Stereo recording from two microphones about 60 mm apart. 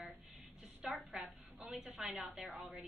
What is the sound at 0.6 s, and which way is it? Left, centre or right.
A woman's voice, centre.